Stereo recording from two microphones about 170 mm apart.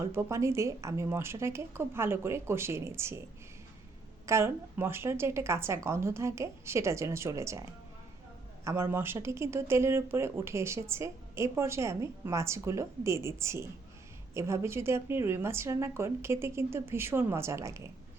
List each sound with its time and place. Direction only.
0.0 s speech: 15° right (ahead or behind)
4.3 s speech: 15° right (ahead or behind)